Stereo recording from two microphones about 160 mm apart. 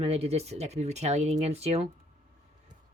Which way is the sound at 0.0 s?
40° right (ahead or behind).